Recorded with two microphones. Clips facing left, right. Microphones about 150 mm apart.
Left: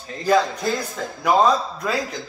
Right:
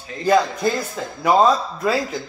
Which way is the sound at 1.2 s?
Centre (ahead or behind).